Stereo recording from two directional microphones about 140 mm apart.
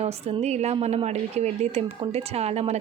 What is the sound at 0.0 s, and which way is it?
A woman's voice, 50° right (ahead or behind).